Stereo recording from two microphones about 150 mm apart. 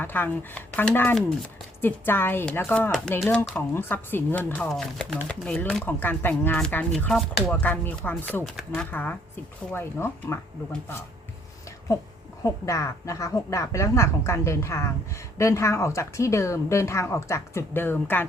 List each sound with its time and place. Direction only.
0.0 s speech: 10° left (ahead or behind)
2.9 s speech: centre (ahead or behind)
3.8 s speech: 15° left (ahead or behind)
12.4 s speech: 20° left (ahead or behind)